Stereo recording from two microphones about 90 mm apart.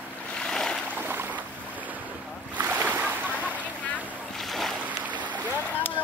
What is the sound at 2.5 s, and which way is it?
Boat, 20° right (ahead or behind).